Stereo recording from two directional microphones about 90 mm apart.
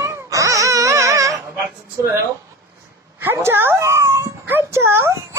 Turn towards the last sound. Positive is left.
turn(degrees=-25)  # may be behind; listen again after turning